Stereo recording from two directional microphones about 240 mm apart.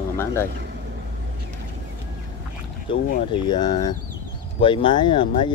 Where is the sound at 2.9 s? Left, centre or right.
Left.